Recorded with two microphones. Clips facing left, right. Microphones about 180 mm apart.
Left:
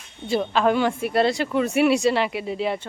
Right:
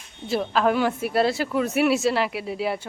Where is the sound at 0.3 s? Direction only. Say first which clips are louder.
Left 1 dB; centre (ahead or behind).